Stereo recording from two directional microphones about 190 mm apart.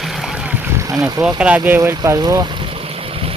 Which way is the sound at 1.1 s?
20° right (ahead or behind).